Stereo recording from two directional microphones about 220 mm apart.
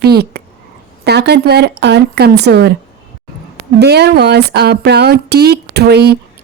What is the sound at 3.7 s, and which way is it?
Speech, 50° right (ahead or behind).